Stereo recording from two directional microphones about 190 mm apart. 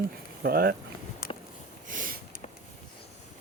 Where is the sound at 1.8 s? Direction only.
45° right (ahead or behind).